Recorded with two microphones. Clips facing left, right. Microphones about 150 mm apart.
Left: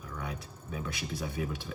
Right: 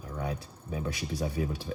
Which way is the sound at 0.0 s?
35° right (ahead or behind).